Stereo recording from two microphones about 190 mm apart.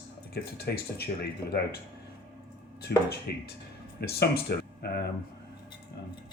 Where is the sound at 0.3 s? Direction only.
60° left (ahead or behind).